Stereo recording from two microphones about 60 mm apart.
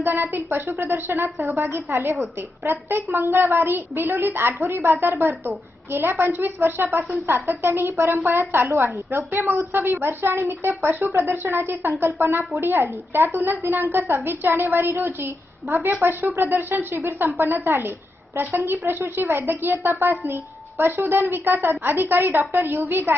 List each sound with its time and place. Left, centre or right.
0.0 s speech: right
11.3 s speech: right